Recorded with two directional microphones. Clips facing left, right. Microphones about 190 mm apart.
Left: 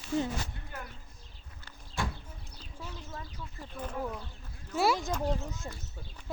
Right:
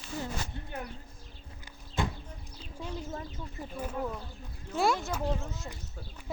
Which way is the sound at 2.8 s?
30° right (ahead or behind).